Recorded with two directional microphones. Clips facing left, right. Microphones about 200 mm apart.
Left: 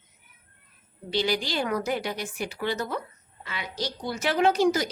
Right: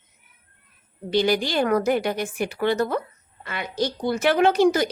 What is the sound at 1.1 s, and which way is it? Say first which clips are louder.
A woman's voice: right 6 dB; 50° right (ahead or behind).